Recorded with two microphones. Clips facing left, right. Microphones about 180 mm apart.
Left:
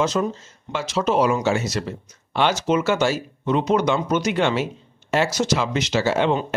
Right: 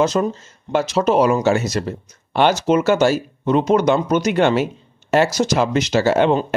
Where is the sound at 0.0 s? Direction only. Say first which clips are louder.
Right 4 dB; 40° right (ahead or behind).